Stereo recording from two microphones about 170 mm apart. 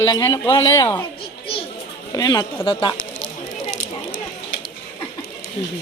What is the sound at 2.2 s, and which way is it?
Speech, 25° left (ahead or behind).